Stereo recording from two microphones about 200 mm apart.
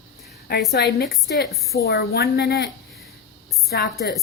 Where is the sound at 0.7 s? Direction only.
50° left (ahead or behind).